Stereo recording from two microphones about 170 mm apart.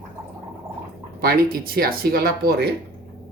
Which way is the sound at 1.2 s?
60° right (ahead or behind).